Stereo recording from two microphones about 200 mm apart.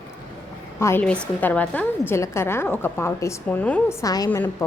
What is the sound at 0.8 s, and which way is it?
A woman's voice, 10° left (ahead or behind).